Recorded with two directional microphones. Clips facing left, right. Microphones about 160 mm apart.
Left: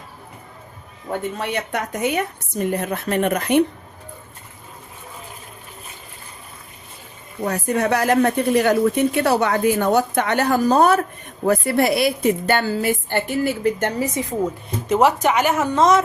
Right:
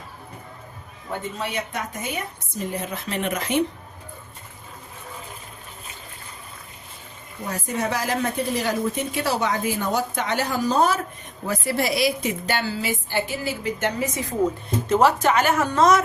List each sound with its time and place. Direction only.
1.4 s speech: 65° left (ahead or behind)
7.4 s speech: 65° left (ahead or behind)
14.8 s speech: 15° left (ahead or behind)